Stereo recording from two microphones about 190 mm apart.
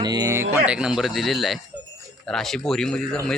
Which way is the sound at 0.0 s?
20° right (ahead or behind).